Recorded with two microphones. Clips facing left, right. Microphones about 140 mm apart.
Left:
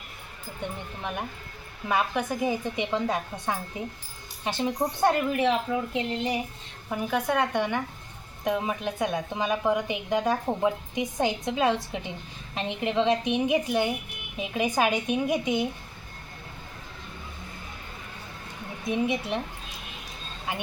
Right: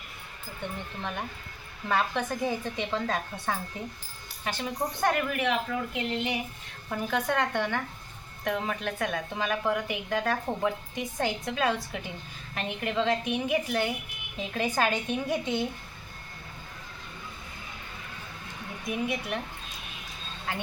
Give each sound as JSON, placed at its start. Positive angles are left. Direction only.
{"t": 0.6, "sound": "a woman's voice", "side_deg": 15}
{"t": 1.9, "sound": "a woman's voice", "side_deg": 10}
{"t": 6.9, "sound": "a woman's voice", "side_deg": 10}
{"t": 18.9, "sound": "a woman's voice", "side_deg": 25}
{"t": 20.5, "sound": "speech", "side_deg": 15}